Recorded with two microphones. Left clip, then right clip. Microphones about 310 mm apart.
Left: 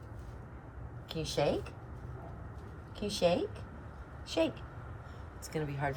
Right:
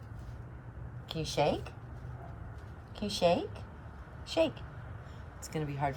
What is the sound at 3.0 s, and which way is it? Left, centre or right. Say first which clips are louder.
A woman's voice: right 1 dB; centre.